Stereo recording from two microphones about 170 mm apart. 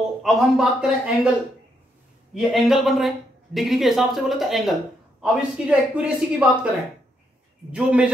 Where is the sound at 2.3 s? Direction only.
Centre (ahead or behind).